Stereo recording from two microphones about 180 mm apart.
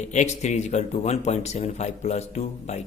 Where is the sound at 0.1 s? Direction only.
40° left (ahead or behind).